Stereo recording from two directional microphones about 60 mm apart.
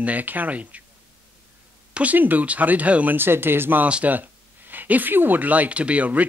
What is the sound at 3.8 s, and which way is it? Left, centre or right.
Speech, centre.